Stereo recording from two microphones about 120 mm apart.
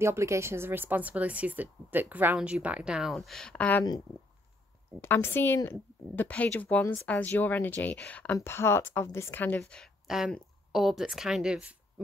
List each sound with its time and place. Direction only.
0.0 s a woman's voice: 25° right (ahead or behind); by 3.8 s 10° left (ahead or behind)
5.0 s speech: 20° left (ahead or behind)
6.8 s a woman's voice: 25° left (ahead or behind)
7.1 s a woman's voice: 15° left (ahead or behind)
9.6 s speech: 5° left (ahead or behind)